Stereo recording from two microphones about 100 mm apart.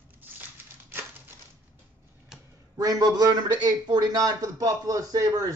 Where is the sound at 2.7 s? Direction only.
35° right (ahead or behind).